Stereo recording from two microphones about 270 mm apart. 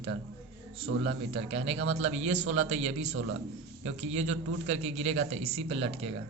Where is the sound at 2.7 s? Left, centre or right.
Right.